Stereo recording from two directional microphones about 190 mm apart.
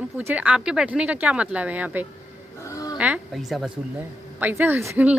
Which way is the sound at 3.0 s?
5° right (ahead or behind).